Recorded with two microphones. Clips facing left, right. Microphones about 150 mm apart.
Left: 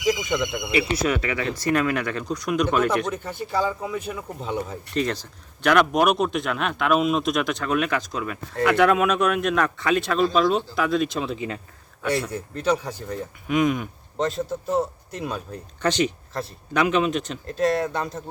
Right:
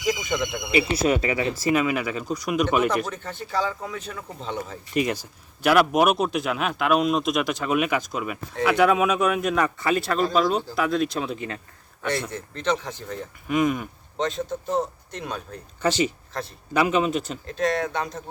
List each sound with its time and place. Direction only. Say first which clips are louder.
0.0 s speech: left 2 dB; centre (ahead or behind)
0.7 s speech: right 2 dB; 25° right (ahead or behind)
1.5 s speech: left 2 dB; 5° right (ahead or behind)
3.2 s speech: left 2 dB; 10° left (ahead or behind)
4.9 s speech: right 1 dB; 10° right (ahead or behind); by 13.1 s 10° left (ahead or behind)
13.5 s speech: left 1 dB; centre (ahead or behind)
15.8 s speech: even; 5° right (ahead or behind)